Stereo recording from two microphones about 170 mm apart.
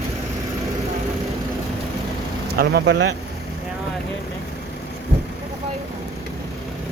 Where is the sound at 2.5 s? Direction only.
70° right (ahead or behind).